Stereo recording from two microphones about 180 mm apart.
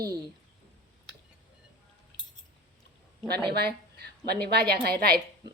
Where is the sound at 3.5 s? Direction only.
65° right (ahead or behind).